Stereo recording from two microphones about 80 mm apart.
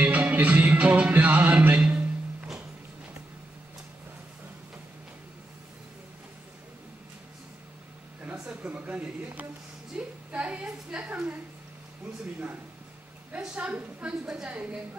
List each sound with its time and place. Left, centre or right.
0.0 s music: centre
8.2 s a sound: centre
13.3 s a woman's voice: centre